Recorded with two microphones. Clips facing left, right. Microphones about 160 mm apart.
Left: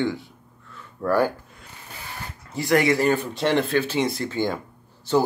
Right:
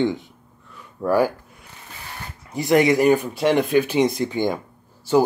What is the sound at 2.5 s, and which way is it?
Speech, 20° right (ahead or behind).